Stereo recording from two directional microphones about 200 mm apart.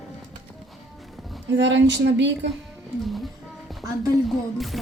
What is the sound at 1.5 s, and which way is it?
Speech, 65° right (ahead or behind).